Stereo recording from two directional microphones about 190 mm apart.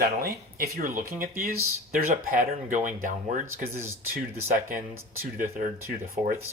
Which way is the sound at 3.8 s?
15° right (ahead or behind).